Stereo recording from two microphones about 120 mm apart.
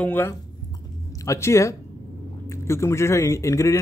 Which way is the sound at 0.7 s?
30° left (ahead or behind).